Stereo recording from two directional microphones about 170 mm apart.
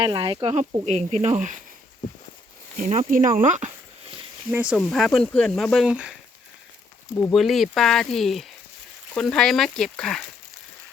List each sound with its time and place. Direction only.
0.0 s speech: 25° right (ahead or behind)
0.4 s speech: 40° right (ahead or behind)
2.7 s speech: 50° right (ahead or behind)
4.5 s speech: 5° right (ahead or behind)
7.2 s speech: centre (ahead or behind)